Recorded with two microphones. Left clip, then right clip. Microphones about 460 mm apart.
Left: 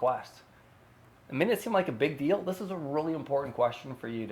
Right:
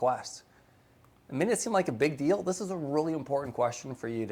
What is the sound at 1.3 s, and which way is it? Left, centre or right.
Speech, centre.